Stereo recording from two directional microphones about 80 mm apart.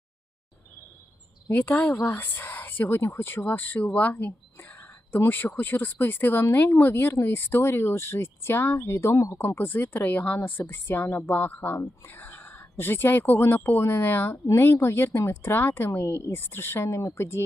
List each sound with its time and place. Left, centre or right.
1.5 s speech: left
5.5 s speech: left